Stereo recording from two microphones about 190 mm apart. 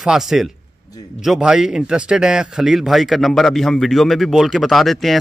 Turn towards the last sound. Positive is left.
turn(degrees=0)  # may be behind; listen again after turning